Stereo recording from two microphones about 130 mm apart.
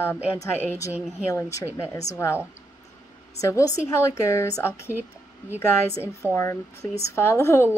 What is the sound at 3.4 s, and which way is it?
Speech, 25° left (ahead or behind).